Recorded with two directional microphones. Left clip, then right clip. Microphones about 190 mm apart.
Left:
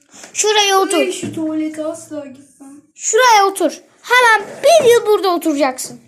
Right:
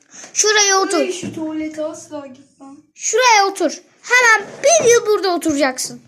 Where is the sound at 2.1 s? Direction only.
25° right (ahead or behind).